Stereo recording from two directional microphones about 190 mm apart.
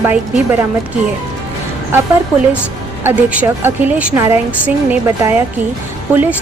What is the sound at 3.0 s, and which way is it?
A woman's voice, 10° right (ahead or behind).